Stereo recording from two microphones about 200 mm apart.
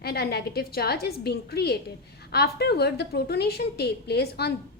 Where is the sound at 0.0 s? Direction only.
50° left (ahead or behind).